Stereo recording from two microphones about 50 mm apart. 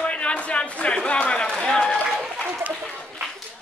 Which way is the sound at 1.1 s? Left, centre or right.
Left.